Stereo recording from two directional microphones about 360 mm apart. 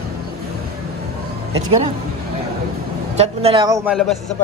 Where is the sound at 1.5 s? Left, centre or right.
Centre.